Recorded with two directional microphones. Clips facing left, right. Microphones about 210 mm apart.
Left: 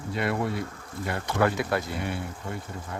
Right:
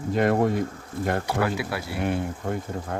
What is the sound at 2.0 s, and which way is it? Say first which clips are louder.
Speech: right 6 dB; 50° right (ahead or behind).